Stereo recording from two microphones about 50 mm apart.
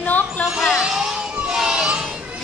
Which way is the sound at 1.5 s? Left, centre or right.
Centre.